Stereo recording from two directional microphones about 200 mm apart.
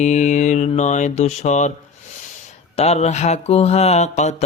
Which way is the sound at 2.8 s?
30° left (ahead or behind).